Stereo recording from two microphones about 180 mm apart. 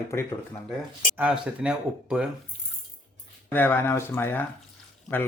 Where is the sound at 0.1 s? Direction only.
15° left (ahead or behind).